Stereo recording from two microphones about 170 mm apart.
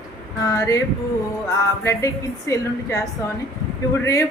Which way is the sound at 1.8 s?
20° left (ahead or behind).